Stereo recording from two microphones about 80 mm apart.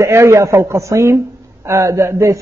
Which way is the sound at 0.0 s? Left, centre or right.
Right.